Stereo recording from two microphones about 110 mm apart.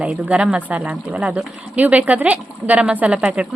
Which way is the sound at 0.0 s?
10° right (ahead or behind).